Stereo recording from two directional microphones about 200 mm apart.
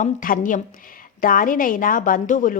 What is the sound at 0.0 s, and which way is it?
A woman's voice, 40° left (ahead or behind).